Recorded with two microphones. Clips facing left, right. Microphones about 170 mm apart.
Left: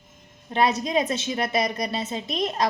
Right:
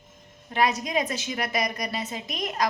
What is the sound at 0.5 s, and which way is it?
A woman's voice, 25° left (ahead or behind).